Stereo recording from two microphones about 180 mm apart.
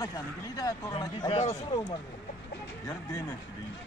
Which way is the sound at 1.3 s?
35° left (ahead or behind).